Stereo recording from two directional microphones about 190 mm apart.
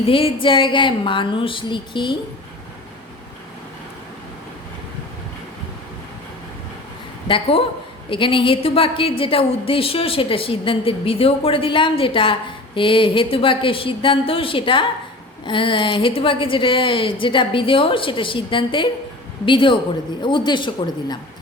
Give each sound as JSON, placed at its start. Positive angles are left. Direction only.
{"t": 0.0, "sound": "a woman's voice", "side_deg": 30}
{"t": 7.3, "sound": "a woman's voice", "side_deg": 25}